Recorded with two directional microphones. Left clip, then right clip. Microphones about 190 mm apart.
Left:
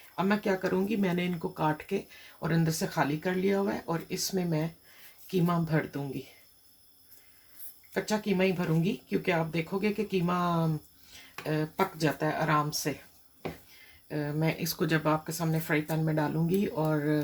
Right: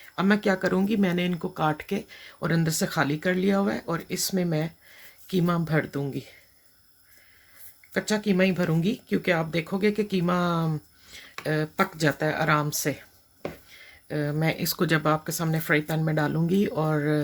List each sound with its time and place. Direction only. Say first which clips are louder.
0.2 s speech: right 5 dB; 45° right (ahead or behind)
7.9 s speech: right 5 dB; 45° right (ahead or behind)
14.1 s speech: right 4 dB; 45° right (ahead or behind)